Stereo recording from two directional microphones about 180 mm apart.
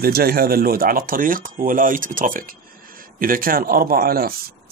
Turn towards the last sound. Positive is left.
turn(degrees=-55)  # may be behind; listen again after turning